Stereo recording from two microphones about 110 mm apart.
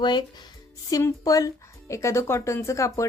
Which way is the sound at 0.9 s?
30° left (ahead or behind).